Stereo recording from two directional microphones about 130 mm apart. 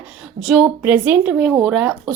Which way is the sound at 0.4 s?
5° right (ahead or behind).